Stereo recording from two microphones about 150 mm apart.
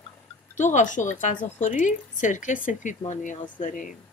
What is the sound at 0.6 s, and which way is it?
Speech, 55° left (ahead or behind).